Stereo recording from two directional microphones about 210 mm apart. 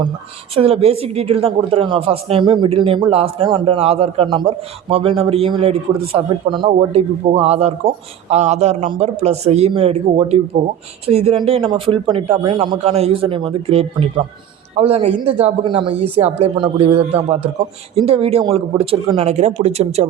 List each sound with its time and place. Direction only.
0.5 s speech: 30° right (ahead or behind)